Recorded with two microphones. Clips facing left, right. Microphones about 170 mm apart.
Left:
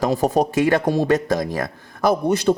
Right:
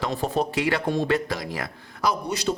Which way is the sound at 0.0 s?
40° left (ahead or behind).